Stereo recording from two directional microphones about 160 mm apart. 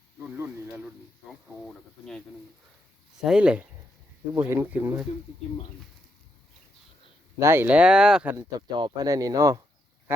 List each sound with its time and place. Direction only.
1.6 s speech: 5° left (ahead or behind); by 5.0 s 15° right (ahead or behind)
7.3 s speech: 15° right (ahead or behind)
8.4 s speech: 25° right (ahead or behind)